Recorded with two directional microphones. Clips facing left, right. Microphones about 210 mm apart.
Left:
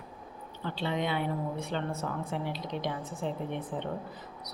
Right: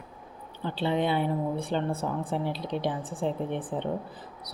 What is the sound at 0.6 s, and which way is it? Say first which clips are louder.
A woman's voice: right 5 dB; 30° right (ahead or behind).